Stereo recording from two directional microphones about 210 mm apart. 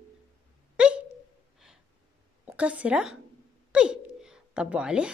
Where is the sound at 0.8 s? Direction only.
5° right (ahead or behind).